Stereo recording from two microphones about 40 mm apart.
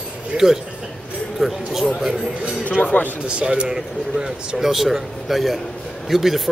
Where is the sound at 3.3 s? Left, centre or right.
Right.